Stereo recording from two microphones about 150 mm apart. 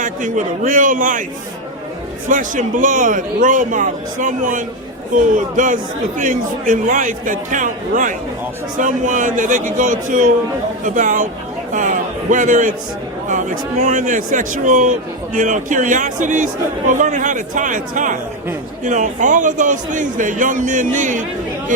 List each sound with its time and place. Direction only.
0.0 s a man's voice: 60° right (ahead or behind)
2.3 s a man's voice: 60° right (ahead or behind)